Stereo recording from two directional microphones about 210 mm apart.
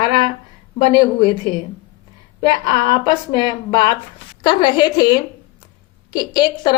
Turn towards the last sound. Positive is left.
turn(degrees=20)  # may be behind; listen again after turning